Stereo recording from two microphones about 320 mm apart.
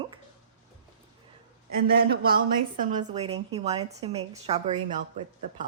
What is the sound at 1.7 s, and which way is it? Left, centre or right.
A woman's voice, right.